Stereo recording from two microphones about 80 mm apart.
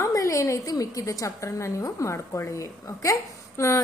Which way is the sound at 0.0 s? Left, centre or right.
Left.